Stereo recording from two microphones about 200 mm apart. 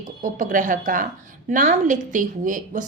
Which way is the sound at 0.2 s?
40° right (ahead or behind).